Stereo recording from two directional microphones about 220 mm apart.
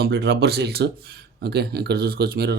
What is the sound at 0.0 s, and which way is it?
Speech, 50° right (ahead or behind).